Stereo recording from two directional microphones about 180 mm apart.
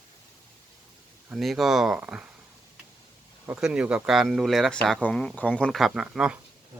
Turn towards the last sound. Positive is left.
turn(degrees=-5)  # may be behind; listen again after turning